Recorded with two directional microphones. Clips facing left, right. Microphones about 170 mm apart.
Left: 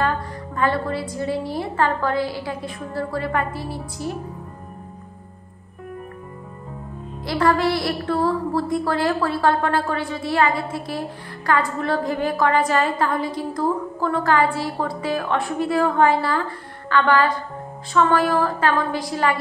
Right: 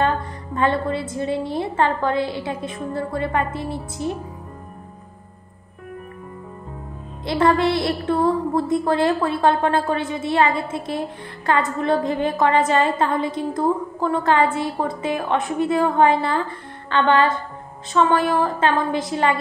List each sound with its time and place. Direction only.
0.6 s a woman's voice: 25° right (ahead or behind)
7.2 s a woman's voice: 25° right (ahead or behind)